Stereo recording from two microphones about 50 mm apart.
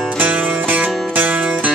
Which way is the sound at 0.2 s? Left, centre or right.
Right.